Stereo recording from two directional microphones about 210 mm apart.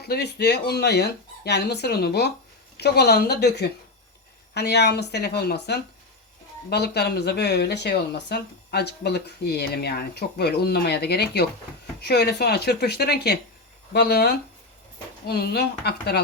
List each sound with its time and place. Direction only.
0.0 s speech: 50° left (ahead or behind)